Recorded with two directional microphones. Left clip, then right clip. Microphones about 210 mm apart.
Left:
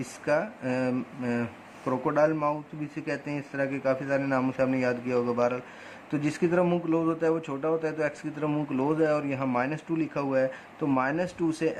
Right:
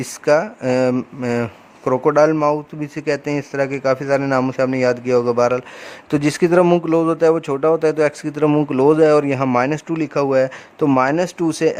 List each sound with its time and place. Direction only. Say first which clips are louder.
0.0 s speech: right 11 dB; 45° right (ahead or behind)